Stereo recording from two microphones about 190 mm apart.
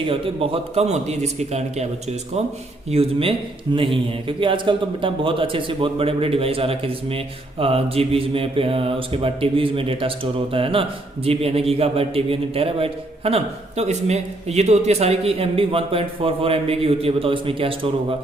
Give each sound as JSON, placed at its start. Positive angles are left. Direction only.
{"t": 0.0, "sound": "a man's voice", "side_deg": -30}